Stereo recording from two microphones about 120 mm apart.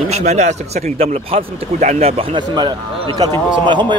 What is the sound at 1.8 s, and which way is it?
A man's voice, 75° right (ahead or behind).